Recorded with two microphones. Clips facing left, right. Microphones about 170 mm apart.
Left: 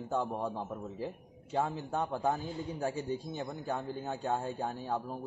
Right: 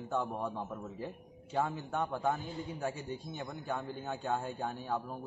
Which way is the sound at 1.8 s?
30° left (ahead or behind).